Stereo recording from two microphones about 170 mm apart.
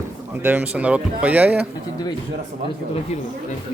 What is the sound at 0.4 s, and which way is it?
A man's voice, 10° right (ahead or behind).